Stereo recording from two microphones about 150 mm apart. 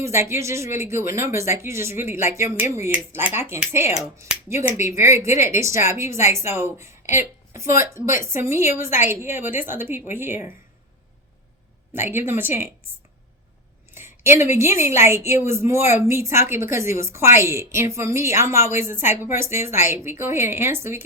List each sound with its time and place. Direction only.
0.0 s a woman's voice: 20° right (ahead or behind)
11.9 s a woman's voice: 15° right (ahead or behind)
13.9 s a woman's voice: 15° right (ahead or behind)